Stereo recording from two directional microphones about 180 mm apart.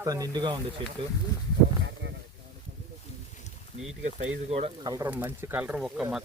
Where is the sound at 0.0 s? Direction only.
20° right (ahead or behind).